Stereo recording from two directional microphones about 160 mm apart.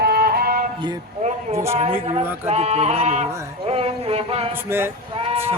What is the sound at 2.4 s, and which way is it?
Speech, 40° right (ahead or behind).